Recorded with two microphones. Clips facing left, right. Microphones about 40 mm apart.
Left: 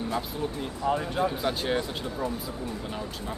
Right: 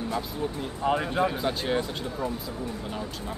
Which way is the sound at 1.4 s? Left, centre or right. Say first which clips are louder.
Even; centre.